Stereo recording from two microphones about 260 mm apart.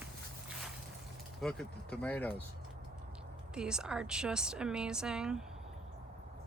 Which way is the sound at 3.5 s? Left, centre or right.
Centre.